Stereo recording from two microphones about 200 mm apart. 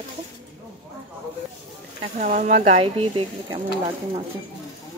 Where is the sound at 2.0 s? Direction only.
35° right (ahead or behind).